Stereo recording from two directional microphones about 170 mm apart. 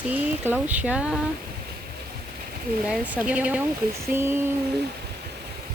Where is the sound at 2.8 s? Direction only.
5° right (ahead or behind).